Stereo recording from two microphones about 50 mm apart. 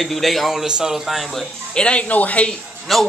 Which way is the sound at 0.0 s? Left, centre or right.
Centre.